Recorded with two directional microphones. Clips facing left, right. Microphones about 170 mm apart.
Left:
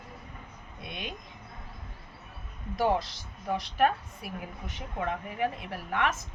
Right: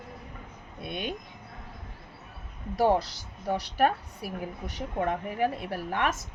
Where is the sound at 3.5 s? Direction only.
35° right (ahead or behind).